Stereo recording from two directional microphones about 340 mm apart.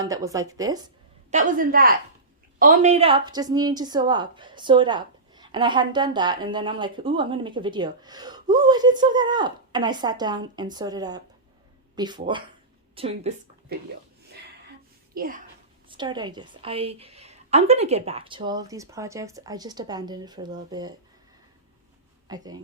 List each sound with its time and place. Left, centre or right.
0.0 s speech: centre
1.3 s a woman's voice: right
15.1 s speech: right
15.9 s speech: centre
22.3 s speech: centre